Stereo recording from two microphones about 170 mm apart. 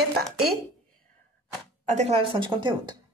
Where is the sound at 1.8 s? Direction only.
40° right (ahead or behind).